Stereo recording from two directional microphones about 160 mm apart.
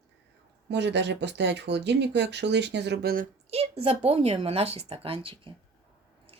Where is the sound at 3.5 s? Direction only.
35° right (ahead or behind).